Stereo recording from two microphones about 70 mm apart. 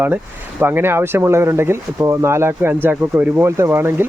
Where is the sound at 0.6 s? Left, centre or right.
Right.